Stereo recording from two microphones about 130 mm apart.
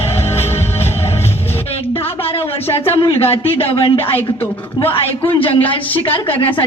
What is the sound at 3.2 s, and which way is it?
Speech, 15° left (ahead or behind).